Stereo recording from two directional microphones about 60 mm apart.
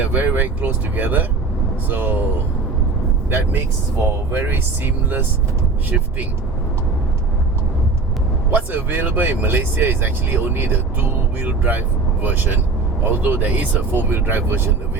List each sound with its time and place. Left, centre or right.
0.0 s speech: right
3.2 s speech: right
8.4 s speech: right
13.5 s speech: right